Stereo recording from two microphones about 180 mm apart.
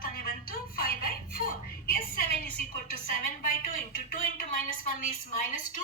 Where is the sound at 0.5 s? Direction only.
55° left (ahead or behind).